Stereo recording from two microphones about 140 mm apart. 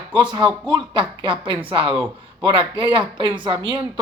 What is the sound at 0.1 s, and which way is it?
Speech, 35° right (ahead or behind).